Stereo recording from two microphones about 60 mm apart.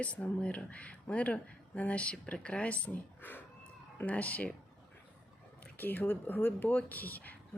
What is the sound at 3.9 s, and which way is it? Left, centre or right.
Speech, left.